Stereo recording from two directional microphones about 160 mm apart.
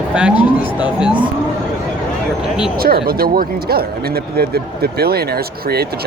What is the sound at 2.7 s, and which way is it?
Speech, 70° right (ahead or behind).